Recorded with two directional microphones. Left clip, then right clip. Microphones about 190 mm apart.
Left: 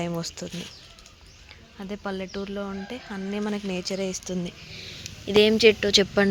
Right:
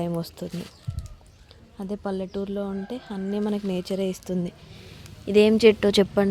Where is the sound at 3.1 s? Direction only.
5° right (ahead or behind).